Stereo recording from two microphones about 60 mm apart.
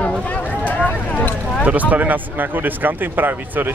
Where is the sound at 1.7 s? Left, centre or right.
Right.